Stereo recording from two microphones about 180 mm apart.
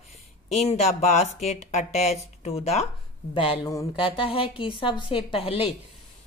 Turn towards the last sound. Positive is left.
turn(degrees=30)  # may be behind; listen again after turning